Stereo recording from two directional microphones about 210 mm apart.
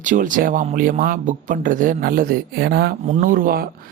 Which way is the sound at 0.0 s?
40° right (ahead or behind).